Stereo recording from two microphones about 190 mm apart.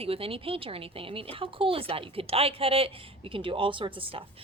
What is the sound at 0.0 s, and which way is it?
Speech, 30° right (ahead or behind).